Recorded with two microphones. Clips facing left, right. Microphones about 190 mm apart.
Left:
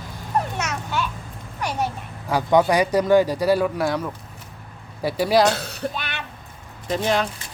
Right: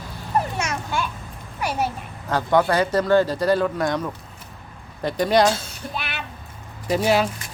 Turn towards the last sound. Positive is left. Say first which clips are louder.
# right 3 dB
turn(degrees=-5)  # may be behind; listen again after turning